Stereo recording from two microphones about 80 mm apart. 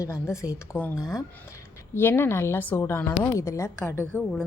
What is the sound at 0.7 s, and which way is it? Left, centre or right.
A woman's voice, left.